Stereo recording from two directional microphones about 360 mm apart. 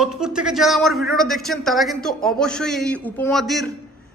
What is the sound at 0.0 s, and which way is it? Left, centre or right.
A man's voice, centre.